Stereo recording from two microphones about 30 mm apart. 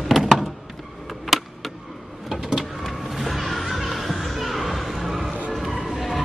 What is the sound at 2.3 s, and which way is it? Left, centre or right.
Music, centre.